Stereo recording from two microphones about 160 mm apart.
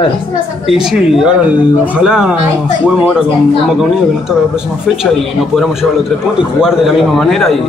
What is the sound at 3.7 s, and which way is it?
Speech, 5° right (ahead or behind).